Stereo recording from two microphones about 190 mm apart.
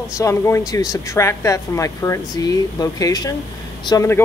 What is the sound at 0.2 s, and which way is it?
Speech, 15° left (ahead or behind).